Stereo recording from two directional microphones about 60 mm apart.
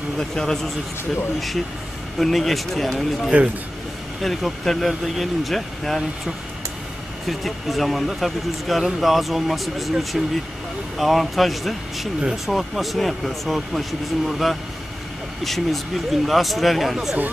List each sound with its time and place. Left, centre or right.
0.2 s speech: centre
2.1 s speech: centre
7.2 s speech: centre